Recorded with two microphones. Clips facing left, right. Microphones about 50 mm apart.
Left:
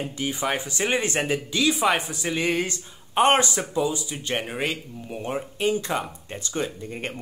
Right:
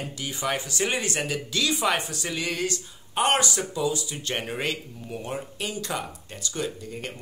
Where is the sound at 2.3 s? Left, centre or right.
Left.